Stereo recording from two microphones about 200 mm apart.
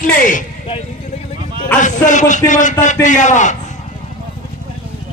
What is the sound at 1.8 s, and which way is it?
A man's voice, 40° left (ahead or behind).